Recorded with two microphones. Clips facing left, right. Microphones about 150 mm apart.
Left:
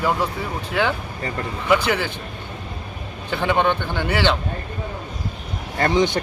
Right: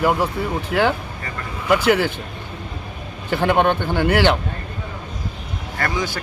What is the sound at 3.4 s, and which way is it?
Speech, 10° right (ahead or behind).